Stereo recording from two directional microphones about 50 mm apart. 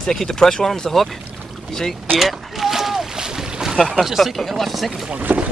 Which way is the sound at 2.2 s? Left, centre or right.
Centre.